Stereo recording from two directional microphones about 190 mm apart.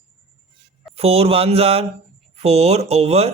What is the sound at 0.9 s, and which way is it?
Speech, 30° right (ahead or behind).